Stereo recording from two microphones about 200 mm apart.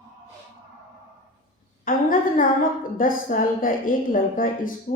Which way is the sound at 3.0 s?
45° left (ahead or behind).